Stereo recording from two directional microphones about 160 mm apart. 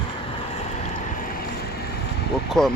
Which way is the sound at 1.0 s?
60° left (ahead or behind).